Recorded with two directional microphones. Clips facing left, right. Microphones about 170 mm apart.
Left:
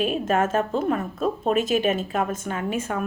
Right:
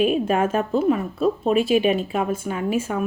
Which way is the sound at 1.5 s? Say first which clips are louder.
Right 3 dB; 45° left (ahead or behind).